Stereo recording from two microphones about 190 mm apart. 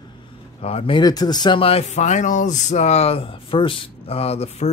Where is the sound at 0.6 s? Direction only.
30° left (ahead or behind).